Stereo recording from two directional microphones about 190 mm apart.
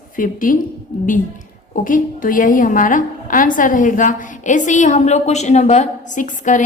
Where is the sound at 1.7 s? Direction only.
45° left (ahead or behind).